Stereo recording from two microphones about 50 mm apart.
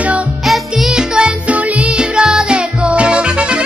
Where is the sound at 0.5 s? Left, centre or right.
Centre.